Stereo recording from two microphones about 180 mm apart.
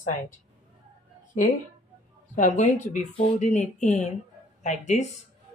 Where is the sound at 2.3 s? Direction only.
45° left (ahead or behind).